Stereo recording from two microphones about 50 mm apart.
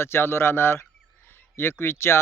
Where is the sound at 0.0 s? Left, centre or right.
Left.